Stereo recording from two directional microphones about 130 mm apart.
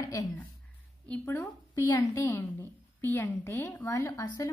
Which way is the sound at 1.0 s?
15° left (ahead or behind).